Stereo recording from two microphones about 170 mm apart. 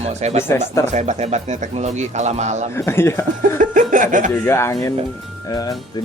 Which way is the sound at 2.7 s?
15° left (ahead or behind).